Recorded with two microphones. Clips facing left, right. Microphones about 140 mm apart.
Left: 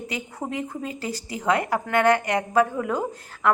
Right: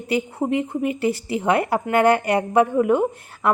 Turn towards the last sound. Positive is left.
turn(degrees=-25)  # may be behind; listen again after turning